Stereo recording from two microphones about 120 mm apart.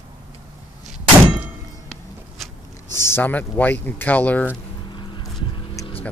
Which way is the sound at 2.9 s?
20° left (ahead or behind).